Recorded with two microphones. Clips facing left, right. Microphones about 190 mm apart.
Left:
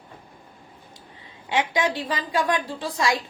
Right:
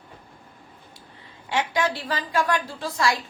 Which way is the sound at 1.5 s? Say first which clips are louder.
Left 1 dB; 15° left (ahead or behind).